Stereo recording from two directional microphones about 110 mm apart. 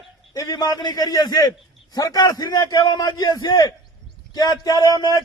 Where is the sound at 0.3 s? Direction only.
30° left (ahead or behind).